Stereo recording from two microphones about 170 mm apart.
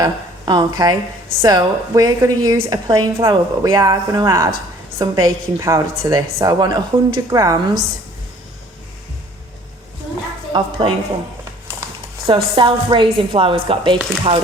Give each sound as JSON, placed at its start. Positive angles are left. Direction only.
{"t": 0.0, "sound": "a woman's voice", "side_deg": -25}
{"t": 10.5, "sound": "a woman's voice", "side_deg": -30}
{"t": 12.2, "sound": "a woman's voice", "side_deg": -30}